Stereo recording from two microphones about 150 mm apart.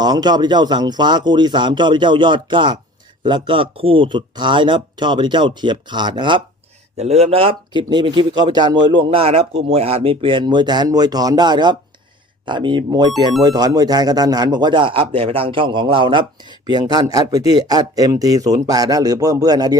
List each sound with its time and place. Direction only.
0.0 s speech: 25° right (ahead or behind)
6.9 s speech: 45° right (ahead or behind); by 19.7 s 25° right (ahead or behind)